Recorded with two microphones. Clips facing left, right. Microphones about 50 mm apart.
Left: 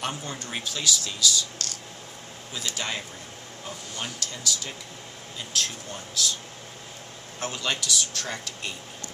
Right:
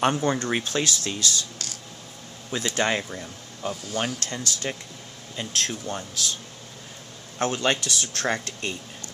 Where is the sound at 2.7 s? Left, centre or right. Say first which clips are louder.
Right 9 dB; right.